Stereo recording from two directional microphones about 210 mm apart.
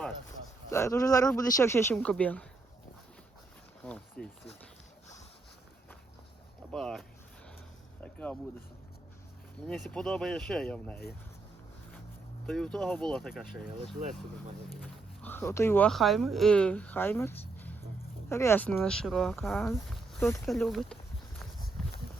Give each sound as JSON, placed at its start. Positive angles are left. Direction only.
{"t": 0.7, "sound": "speech", "side_deg": 15}
{"t": 3.8, "sound": "speech", "side_deg": 5}
{"t": 6.7, "sound": "speech", "side_deg": 0}
{"t": 8.0, "sound": "a sound", "side_deg": 5}
{"t": 9.6, "sound": "speech", "side_deg": 0}
{"t": 12.5, "sound": "speech", "side_deg": 0}
{"t": 15.2, "sound": "speech", "side_deg": 10}
{"t": 19.9, "sound": "walk", "side_deg": 10}
{"t": 21.8, "sound": "a sound", "side_deg": 0}